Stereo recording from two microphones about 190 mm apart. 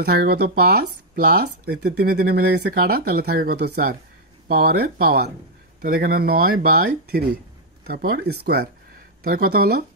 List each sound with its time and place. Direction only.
0.0 s speech: 55° right (ahead or behind)